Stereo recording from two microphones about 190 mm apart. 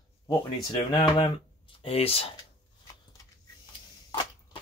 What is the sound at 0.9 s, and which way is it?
Speech, 25° left (ahead or behind).